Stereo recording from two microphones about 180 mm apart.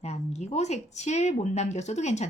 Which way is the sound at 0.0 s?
40° left (ahead or behind).